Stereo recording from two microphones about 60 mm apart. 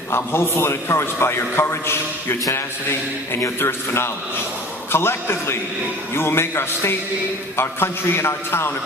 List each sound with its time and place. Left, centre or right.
0.1 s a man's voice: left
3.6 s a man's voice: left